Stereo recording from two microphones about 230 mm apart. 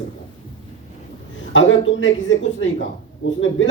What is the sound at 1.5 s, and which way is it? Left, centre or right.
Speech, left.